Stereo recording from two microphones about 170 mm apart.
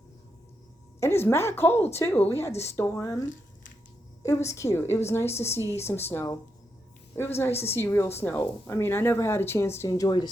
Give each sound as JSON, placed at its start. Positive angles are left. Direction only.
{"t": 0.9, "sound": "speech", "side_deg": 15}